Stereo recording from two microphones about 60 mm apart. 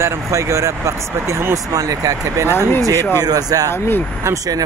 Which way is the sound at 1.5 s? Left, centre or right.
Right.